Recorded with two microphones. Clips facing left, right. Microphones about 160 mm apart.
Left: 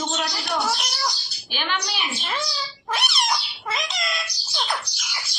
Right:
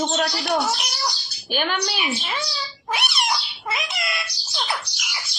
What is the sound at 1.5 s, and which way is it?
Speech, 45° right (ahead or behind).